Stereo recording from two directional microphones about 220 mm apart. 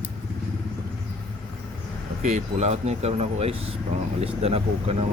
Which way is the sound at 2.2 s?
35° right (ahead or behind).